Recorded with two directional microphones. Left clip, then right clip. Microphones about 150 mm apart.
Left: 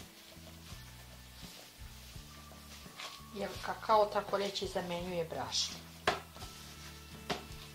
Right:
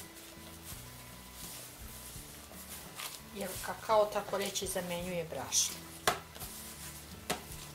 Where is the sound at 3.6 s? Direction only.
20° left (ahead or behind).